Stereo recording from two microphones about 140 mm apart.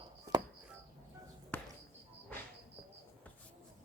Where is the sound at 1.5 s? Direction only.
10° left (ahead or behind).